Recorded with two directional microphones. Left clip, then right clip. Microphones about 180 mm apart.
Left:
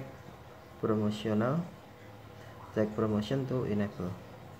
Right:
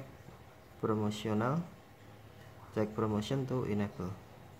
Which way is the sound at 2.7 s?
15° right (ahead or behind).